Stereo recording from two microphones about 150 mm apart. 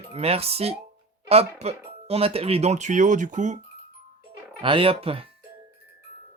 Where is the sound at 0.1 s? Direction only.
40° right (ahead or behind).